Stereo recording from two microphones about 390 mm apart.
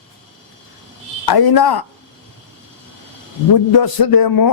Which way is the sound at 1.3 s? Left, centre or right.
Left.